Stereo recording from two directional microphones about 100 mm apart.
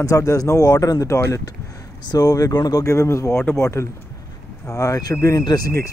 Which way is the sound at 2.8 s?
30° left (ahead or behind).